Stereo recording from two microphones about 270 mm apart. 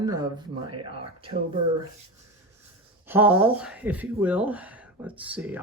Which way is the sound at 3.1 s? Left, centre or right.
Centre.